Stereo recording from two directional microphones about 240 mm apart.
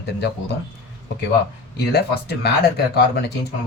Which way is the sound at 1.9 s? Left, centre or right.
Left.